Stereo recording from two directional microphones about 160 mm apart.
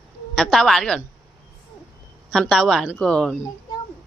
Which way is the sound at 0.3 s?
Centre (ahead or behind).